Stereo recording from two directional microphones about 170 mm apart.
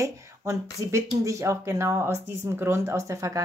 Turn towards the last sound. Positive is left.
turn(degrees=-20)  # may be behind; listen again after turning